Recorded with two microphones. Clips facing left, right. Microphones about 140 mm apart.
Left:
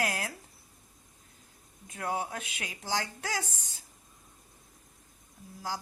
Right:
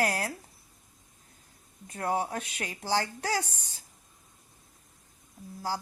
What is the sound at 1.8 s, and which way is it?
Speech, 35° right (ahead or behind).